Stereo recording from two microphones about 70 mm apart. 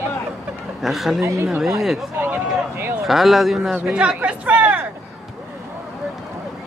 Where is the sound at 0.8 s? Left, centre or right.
Centre.